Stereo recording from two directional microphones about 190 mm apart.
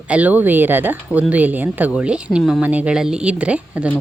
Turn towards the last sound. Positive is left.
turn(degrees=-5)  # may be behind; listen again after turning